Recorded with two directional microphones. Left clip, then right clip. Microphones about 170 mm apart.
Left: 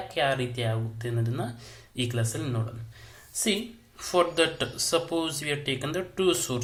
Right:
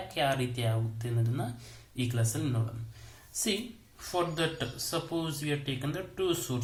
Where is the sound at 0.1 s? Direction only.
Centre (ahead or behind).